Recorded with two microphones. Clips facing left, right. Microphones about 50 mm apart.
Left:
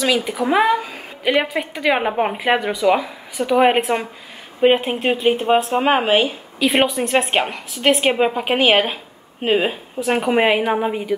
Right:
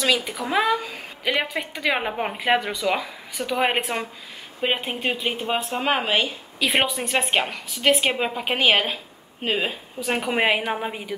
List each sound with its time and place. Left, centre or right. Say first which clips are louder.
0.0 s a woman's voice: left 4 dB; centre
0.5 s a woman's voice: left 5 dB; centre
5.7 s a woman's voice: left 7 dB; centre
6.6 s a woman's voice: left 5 dB; centre